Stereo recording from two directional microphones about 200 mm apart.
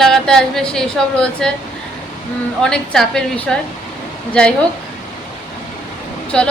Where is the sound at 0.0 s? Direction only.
Centre (ahead or behind).